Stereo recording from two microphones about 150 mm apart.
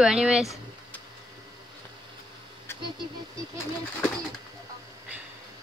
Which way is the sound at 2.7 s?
15° left (ahead or behind).